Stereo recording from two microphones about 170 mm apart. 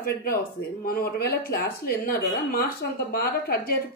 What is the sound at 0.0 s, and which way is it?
Speech, 60° left (ahead or behind).